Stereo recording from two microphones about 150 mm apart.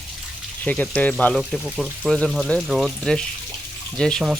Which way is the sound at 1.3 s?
Centre (ahead or behind).